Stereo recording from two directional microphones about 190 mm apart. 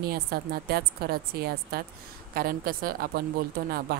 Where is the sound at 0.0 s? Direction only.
50° right (ahead or behind).